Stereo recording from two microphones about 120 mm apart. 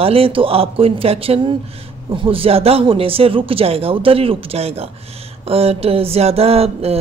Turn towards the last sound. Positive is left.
turn(degrees=-55)  # may be behind; listen again after turning